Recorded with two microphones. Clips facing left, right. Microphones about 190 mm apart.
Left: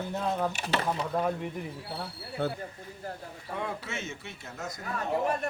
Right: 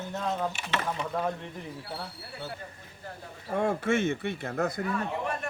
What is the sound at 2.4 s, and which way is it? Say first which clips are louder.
Speech: left 9 dB; 60° left (ahead or behind).